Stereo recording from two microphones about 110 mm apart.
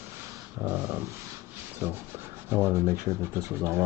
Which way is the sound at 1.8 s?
20° right (ahead or behind).